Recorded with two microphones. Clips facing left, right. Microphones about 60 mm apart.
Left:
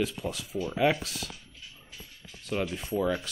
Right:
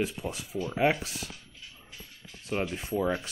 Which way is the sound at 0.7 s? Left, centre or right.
Right.